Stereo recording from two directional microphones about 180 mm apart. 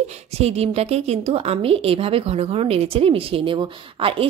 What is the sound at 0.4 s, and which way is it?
A woman's voice, 35° right (ahead or behind).